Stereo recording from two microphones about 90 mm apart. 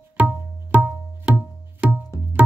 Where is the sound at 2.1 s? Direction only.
35° left (ahead or behind).